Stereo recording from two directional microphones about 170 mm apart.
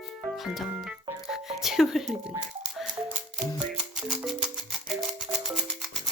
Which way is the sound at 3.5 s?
Centre (ahead or behind).